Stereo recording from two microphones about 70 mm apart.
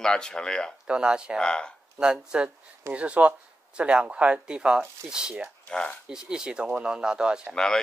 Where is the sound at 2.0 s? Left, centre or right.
Centre.